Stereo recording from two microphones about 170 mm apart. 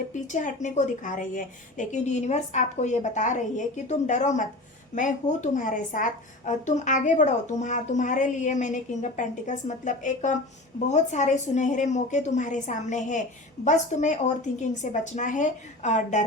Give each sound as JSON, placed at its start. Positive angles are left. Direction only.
{"t": 0.1, "sound": "a woman's voice", "side_deg": 45}